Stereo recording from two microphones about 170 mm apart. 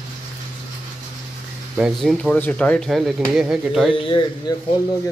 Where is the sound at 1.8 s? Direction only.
Centre (ahead or behind).